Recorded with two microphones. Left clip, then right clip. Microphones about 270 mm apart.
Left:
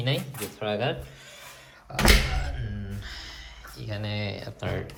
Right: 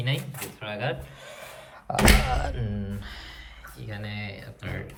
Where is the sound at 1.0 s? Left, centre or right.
Centre.